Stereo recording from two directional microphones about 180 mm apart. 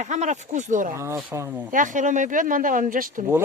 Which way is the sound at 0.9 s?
15° right (ahead or behind).